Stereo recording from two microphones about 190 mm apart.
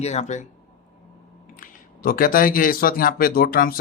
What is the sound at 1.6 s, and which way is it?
Speech, 50° left (ahead or behind).